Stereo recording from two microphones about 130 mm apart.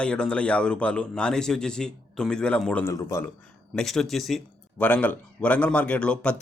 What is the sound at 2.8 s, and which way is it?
Speech, 25° left (ahead or behind).